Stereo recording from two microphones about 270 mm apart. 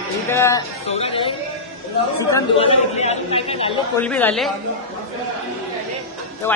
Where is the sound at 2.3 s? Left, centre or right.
Left.